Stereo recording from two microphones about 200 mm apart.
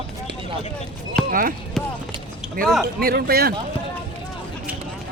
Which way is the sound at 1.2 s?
45° right (ahead or behind).